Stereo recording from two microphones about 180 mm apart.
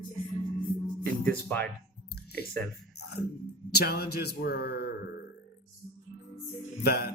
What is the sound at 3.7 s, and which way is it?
Speech, 60° left (ahead or behind).